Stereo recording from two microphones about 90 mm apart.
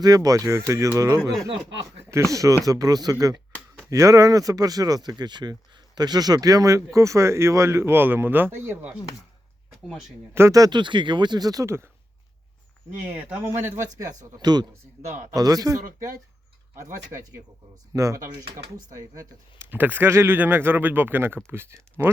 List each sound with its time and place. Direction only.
0.0 s speech: 40° right (ahead or behind); by 8.9 s 25° right (ahead or behind)
10.5 s speech: 45° right (ahead or behind)
10.8 s speech: 60° right (ahead or behind); by 11.9 s 30° right (ahead or behind)
13.1 s a man's voice: 20° right (ahead or behind)
13.9 s speech: 45° right (ahead or behind)
17.9 s speech: 35° right (ahead or behind)
19.7 s a man's voice: 20° right (ahead or behind)